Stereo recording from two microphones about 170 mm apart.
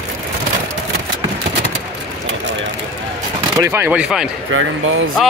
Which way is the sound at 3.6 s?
15° right (ahead or behind).